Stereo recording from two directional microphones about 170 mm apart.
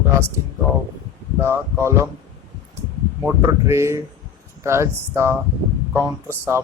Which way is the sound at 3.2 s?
15° right (ahead or behind).